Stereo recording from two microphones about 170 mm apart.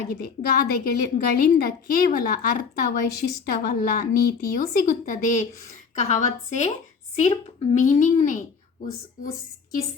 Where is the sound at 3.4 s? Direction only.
60° left (ahead or behind).